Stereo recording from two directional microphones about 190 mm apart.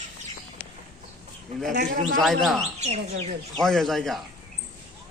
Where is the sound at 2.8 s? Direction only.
35° right (ahead or behind).